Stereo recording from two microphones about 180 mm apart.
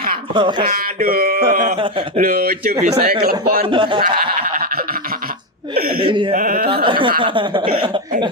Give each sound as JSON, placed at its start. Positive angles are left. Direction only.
{"t": 0.3, "sound": "chuckle", "side_deg": -25}
{"t": 0.7, "sound": "a sound", "side_deg": -55}
{"t": 1.5, "sound": "speech", "side_deg": -45}
{"t": 1.8, "sound": "chuckle", "side_deg": -30}
{"t": 2.2, "sound": "a sound", "side_deg": -55}
{"t": 3.7, "sound": "chuckle", "side_deg": -25}
{"t": 6.1, "sound": "chuckle", "side_deg": -25}
{"t": 6.3, "sound": "speech", "side_deg": -50}
{"t": 6.8, "sound": "chuckle", "side_deg": -30}